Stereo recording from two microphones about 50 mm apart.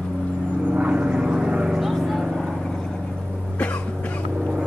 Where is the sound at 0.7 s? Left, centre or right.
Right.